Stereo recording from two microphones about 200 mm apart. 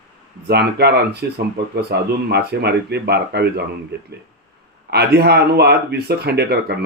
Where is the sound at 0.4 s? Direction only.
55° right (ahead or behind).